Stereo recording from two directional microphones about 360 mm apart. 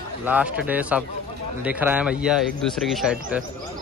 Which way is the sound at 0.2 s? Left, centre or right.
Centre.